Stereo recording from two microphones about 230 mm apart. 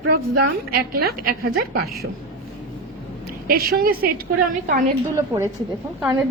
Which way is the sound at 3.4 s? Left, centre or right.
Right.